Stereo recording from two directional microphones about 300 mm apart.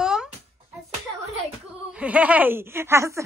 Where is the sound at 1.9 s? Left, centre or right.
Centre.